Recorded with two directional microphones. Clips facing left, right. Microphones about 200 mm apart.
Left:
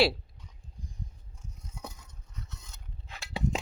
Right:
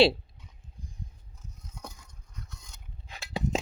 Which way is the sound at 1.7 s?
5° left (ahead or behind).